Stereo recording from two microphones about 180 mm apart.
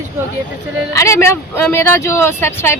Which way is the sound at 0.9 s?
15° left (ahead or behind).